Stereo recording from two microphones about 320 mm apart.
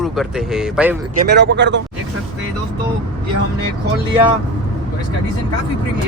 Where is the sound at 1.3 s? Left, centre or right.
Right.